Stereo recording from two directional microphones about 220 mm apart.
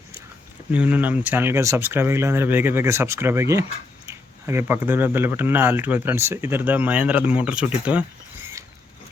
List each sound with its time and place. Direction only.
0.7 s speech: 5° right (ahead or behind)